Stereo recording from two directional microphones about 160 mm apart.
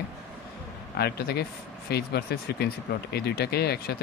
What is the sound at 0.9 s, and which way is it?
Speech, 80° left.